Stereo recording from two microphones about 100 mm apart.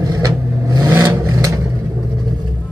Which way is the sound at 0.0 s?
35° right (ahead or behind).